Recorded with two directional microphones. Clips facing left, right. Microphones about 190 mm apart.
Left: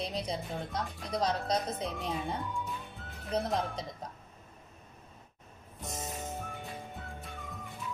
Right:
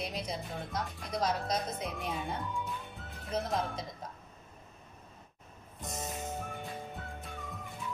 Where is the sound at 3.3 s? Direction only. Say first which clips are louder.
Left 2 dB; 35° left (ahead or behind).